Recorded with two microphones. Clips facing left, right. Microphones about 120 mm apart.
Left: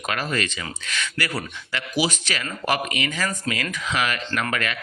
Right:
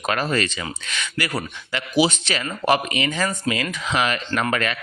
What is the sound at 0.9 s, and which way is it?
Speech, 20° right (ahead or behind).